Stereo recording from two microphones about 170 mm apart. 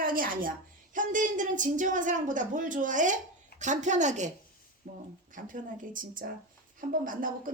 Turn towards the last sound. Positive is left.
turn(degrees=-55)  # may be behind; listen again after turning